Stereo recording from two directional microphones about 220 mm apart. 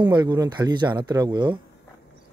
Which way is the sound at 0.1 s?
20° right (ahead or behind).